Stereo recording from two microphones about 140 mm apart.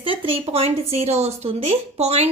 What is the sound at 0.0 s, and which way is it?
A woman's voice, 40° right (ahead or behind).